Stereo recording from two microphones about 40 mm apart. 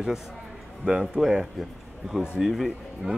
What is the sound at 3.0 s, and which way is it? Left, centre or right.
Speech, centre.